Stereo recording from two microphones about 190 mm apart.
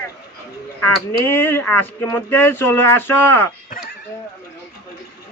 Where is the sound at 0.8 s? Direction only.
10° left (ahead or behind).